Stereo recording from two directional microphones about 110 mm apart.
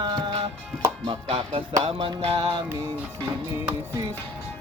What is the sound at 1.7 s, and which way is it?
Music, 70° right (ahead or behind).